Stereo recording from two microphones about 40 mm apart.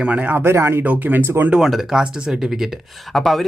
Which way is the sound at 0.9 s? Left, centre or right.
Right.